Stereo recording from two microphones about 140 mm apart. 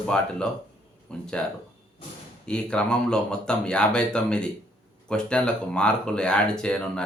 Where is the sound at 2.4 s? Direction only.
5° left (ahead or behind).